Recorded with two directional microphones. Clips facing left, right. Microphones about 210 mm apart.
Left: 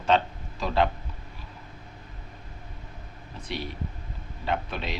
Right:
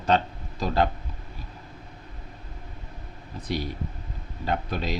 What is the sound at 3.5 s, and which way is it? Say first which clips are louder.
Speech: right 4 dB; 40° right (ahead or behind).